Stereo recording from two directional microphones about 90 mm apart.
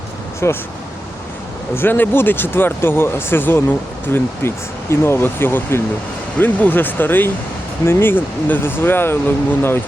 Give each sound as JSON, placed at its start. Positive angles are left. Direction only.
{"t": 0.4, "sound": "speech", "side_deg": 30}
{"t": 1.7, "sound": "speech", "side_deg": 25}